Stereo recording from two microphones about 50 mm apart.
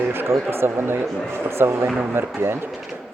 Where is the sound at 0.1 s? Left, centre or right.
Right.